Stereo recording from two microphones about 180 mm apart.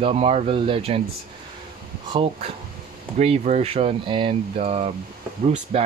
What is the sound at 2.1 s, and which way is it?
Speech, 30° right (ahead or behind).